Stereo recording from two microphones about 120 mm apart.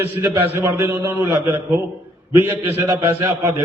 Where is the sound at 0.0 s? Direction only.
20° right (ahead or behind).